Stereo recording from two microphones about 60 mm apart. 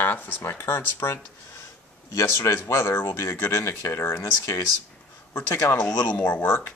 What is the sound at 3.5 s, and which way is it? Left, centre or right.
Speech, left.